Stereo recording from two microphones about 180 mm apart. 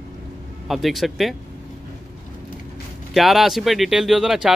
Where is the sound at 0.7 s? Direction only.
Centre (ahead or behind).